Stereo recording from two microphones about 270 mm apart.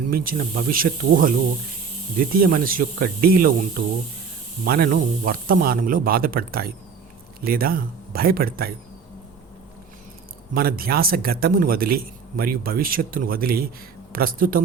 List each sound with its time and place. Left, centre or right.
0.1 s a man's voice: right
2.4 s a man's voice: right
4.6 s a man's voice: right
10.5 s a man's voice: right